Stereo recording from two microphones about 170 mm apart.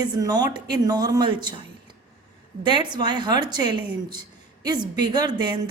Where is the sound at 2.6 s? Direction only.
25° right (ahead or behind).